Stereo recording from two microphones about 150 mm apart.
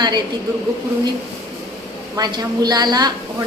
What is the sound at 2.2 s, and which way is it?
Speech, 30° right (ahead or behind).